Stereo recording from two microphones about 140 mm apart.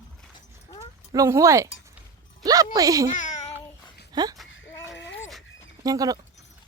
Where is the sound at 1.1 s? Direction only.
25° right (ahead or behind).